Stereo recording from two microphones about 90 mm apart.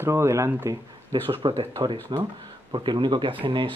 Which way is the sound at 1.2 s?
85° right.